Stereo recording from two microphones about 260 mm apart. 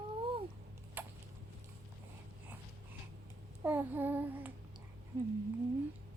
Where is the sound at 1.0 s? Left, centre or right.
Centre.